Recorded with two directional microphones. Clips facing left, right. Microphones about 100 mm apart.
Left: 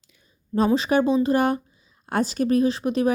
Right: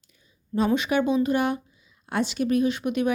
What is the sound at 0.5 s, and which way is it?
Speech, 35° left (ahead or behind).